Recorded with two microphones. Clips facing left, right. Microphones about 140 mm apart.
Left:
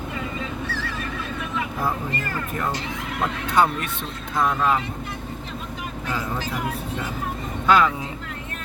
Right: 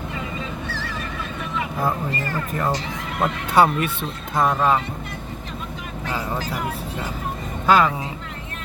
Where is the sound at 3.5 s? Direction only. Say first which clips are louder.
Right 3 dB; 5° right (ahead or behind).